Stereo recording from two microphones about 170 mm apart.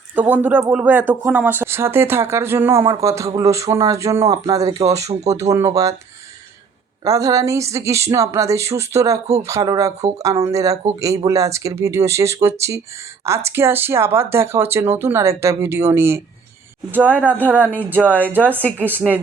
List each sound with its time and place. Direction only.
0.2 s speech: 10° right (ahead or behind)
7.0 s speech: 20° right (ahead or behind)
18.8 s a woman's voice: 10° left (ahead or behind)